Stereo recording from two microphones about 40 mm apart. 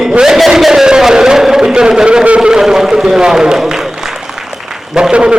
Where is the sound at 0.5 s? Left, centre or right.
Centre.